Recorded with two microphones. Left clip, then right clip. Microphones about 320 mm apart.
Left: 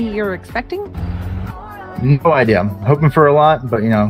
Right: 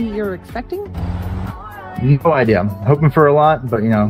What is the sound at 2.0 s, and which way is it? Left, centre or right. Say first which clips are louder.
Speech: left 1 dB; centre.